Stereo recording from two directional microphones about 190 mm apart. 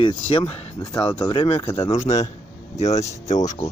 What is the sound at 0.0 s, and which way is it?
Speech, 30° left (ahead or behind).